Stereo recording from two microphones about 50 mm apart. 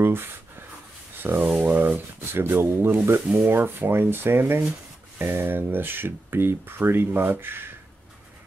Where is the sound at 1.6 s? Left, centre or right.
Right.